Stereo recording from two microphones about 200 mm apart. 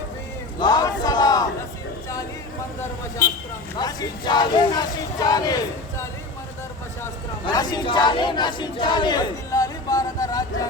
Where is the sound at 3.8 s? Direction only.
20° left (ahead or behind).